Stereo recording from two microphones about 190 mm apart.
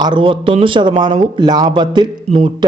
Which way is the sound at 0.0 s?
25° right (ahead or behind).